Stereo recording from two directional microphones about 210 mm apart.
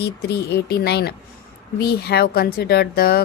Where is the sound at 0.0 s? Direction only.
50° left (ahead or behind).